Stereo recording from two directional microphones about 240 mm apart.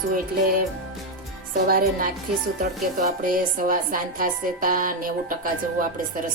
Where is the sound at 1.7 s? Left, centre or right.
Right.